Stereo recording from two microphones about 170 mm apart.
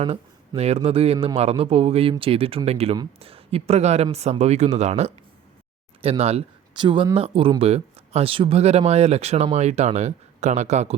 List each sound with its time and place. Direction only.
0.0 s speech: 35° right (ahead or behind)